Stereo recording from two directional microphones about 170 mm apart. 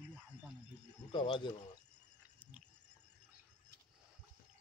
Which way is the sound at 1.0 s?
30° left (ahead or behind).